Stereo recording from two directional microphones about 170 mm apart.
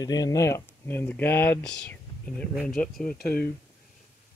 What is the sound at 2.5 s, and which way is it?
Speech, 5° right (ahead or behind).